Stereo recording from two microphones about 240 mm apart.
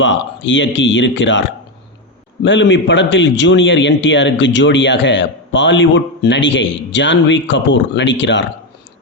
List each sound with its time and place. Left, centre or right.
0.0 s a man's voice: left